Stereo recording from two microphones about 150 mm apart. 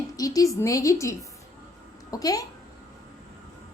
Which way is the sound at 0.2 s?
25° left (ahead or behind).